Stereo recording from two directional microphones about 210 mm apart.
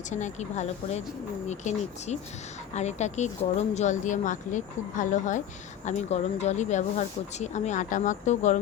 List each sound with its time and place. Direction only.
0.1 s speech: 35° left (ahead or behind)